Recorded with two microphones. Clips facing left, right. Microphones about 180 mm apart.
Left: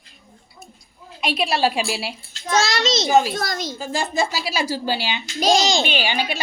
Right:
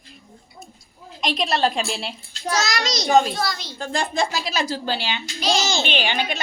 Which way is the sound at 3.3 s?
50° left (ahead or behind).